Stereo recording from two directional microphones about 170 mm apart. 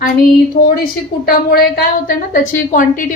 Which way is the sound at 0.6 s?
50° left (ahead or behind).